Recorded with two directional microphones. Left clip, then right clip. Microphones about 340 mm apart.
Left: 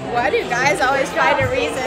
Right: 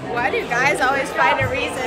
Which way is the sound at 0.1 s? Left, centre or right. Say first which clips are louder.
Left 2 dB; centre.